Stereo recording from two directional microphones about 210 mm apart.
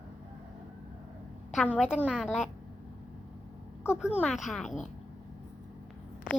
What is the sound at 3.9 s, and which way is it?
Speech, 5° right (ahead or behind).